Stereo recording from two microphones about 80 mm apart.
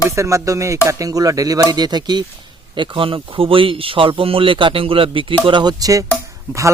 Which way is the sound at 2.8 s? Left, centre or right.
Right.